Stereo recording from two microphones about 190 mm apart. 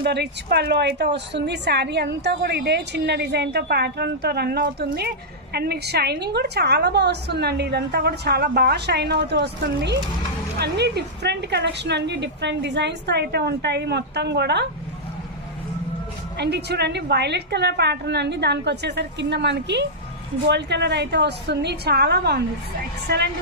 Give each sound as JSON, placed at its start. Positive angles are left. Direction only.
{"t": 0.0, "sound": "a woman's voice", "side_deg": -60}
{"t": 16.3, "sound": "a woman's voice", "side_deg": -60}